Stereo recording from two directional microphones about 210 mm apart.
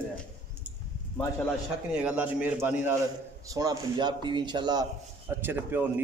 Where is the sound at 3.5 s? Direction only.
20° right (ahead or behind).